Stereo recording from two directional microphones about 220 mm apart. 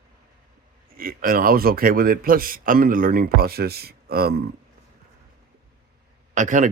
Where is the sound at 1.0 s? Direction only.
40° right (ahead or behind).